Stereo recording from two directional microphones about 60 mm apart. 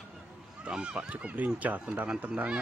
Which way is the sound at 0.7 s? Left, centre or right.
Centre.